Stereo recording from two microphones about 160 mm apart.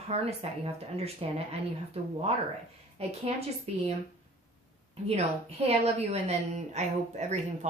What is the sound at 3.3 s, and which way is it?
Speech, 40° right (ahead or behind).